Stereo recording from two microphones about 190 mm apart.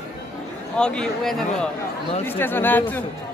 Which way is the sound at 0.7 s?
5° left (ahead or behind).